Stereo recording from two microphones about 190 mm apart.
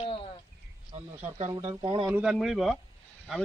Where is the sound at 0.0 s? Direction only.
30° left (ahead or behind).